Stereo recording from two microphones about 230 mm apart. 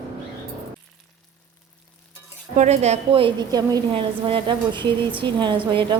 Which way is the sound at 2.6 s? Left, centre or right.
Right.